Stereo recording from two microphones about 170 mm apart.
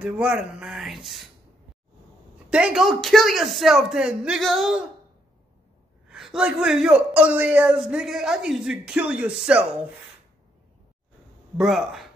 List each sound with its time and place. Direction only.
0.0 s a man's voice: 5° right (ahead or behind)
2.5 s a man's voice: 5° right (ahead or behind)
6.0 s a man's voice: 5° right (ahead or behind)
11.5 s a man's voice: centre (ahead or behind)